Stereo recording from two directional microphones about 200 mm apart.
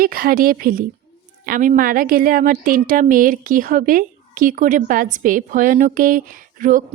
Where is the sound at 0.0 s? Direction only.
45° right (ahead or behind).